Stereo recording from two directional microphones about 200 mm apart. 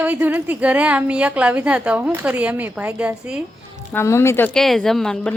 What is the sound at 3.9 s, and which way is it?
Speech, 15° left (ahead or behind).